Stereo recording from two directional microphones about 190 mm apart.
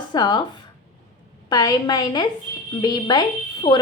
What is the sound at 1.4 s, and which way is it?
Speech, 20° left (ahead or behind).